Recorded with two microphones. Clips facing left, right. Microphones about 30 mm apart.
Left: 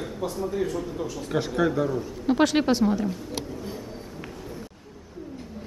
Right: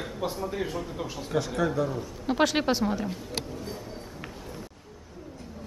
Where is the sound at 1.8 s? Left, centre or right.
Centre.